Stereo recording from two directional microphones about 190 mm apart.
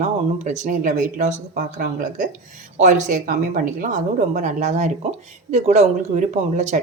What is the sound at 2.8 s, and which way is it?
Speech, 40° right (ahead or behind).